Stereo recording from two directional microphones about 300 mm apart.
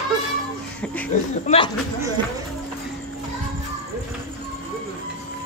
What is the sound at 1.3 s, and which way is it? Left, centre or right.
Speech, left.